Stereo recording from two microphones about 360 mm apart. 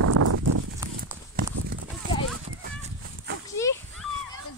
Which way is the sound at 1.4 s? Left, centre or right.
Right.